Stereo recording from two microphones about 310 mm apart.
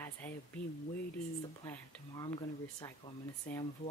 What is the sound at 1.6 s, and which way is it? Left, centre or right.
Speech, centre.